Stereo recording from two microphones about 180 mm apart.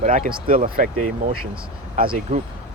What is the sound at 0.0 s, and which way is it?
Speech, 45° right (ahead or behind).